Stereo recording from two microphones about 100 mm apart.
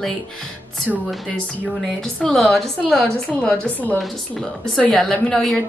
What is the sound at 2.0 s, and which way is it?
A woman's voice, 5° left (ahead or behind).